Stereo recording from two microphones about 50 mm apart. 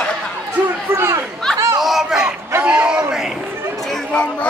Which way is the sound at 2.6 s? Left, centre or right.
Right.